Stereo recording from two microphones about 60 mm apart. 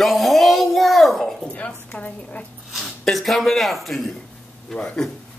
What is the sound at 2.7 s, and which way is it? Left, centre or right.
Speech, centre.